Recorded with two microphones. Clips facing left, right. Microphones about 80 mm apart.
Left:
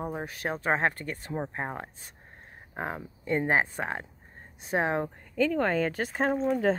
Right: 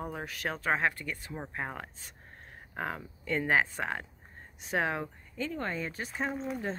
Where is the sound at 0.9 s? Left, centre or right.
Left.